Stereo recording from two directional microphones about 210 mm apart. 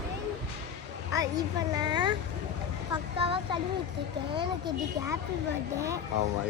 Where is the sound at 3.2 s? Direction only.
25° right (ahead or behind).